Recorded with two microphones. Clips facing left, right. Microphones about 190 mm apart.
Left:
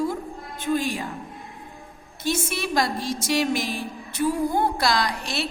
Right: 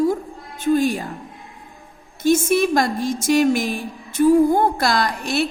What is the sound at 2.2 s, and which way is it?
A woman's voice, 50° right (ahead or behind).